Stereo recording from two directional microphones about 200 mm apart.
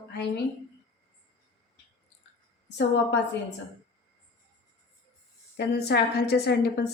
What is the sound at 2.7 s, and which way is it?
Speech, 60° left (ahead or behind).